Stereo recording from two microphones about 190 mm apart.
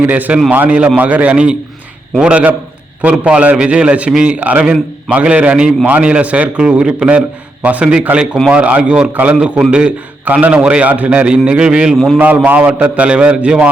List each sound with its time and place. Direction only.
0.0 s a man's voice: 10° right (ahead or behind)